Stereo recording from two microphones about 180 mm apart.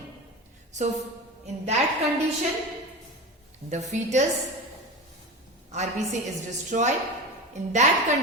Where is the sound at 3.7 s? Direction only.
40° right (ahead or behind).